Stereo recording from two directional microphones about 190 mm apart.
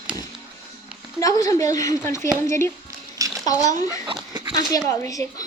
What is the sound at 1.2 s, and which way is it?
A child's voice, 20° left (ahead or behind).